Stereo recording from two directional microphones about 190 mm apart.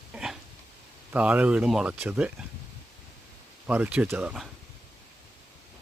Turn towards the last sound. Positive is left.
turn(degrees=-5)  # may be behind; listen again after turning